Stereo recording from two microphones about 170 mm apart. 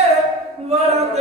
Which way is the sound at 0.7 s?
40° right (ahead or behind).